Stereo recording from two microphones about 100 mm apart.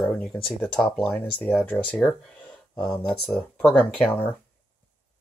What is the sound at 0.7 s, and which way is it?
Speech, 15° left (ahead or behind).